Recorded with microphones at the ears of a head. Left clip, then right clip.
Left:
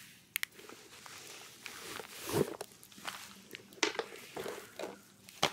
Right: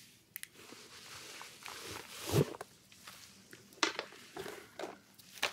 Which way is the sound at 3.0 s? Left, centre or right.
Left.